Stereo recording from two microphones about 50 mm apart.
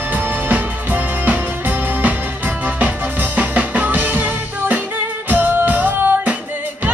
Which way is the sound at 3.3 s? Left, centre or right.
Right.